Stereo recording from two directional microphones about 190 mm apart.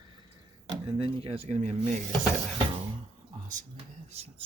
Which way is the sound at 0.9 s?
30° right (ahead or behind).